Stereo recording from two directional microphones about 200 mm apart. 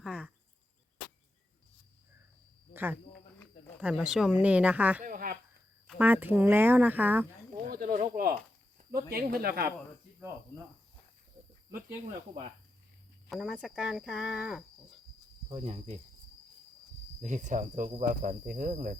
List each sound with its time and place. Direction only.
0.0 s cricket: 5° right (ahead or behind)
2.7 s speech: 10° right (ahead or behind)
5.0 s a sound: 45° right (ahead or behind)
6.0 s speech: 10° right (ahead or behind)
7.7 s snake: 45° right (ahead or behind)
8.9 s speech: 50° right (ahead or behind)
13.3 s speech: centre (ahead or behind)
15.4 s speech: 35° right (ahead or behind)
17.2 s speech: 35° right (ahead or behind)